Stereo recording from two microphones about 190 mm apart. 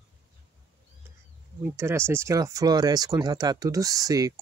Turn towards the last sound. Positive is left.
turn(degrees=-20)  # may be behind; listen again after turning